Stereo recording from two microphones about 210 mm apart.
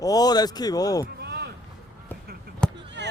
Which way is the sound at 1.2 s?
50° right (ahead or behind).